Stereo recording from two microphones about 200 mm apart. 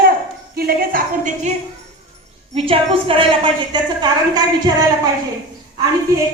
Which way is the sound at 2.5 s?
30° right (ahead or behind).